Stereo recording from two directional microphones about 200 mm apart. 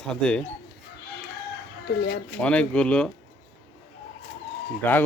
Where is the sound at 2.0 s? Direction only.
50° left (ahead or behind).